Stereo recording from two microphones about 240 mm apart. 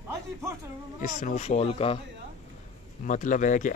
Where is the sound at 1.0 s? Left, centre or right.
Left.